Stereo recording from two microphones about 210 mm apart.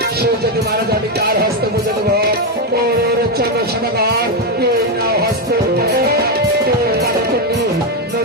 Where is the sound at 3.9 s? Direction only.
50° right (ahead or behind).